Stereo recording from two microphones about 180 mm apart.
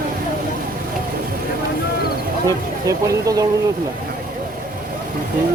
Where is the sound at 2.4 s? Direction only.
20° right (ahead or behind).